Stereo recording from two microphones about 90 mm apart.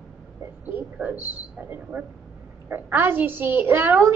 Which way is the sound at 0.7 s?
20° right (ahead or behind).